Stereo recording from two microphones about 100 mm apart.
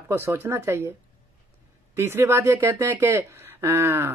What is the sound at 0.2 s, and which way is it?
Speech, 25° right (ahead or behind).